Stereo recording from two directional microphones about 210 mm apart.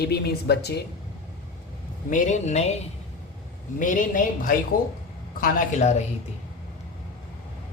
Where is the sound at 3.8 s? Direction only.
40° left (ahead or behind).